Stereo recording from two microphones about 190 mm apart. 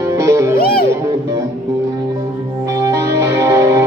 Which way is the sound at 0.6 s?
50° left (ahead or behind).